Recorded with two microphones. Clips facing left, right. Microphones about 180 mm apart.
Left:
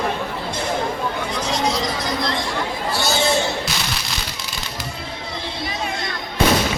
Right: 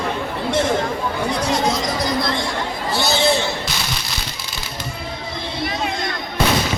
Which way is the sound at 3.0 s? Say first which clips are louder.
Right 2 dB; 15° right (ahead or behind).